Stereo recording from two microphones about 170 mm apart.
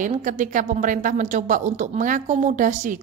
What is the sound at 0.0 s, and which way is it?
A woman's voice, 50° right (ahead or behind).